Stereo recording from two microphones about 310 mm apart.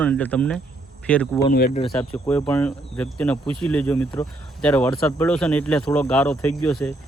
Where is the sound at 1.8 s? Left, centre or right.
Centre.